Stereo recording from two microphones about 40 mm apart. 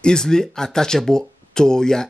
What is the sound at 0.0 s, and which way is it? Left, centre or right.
Speech, centre.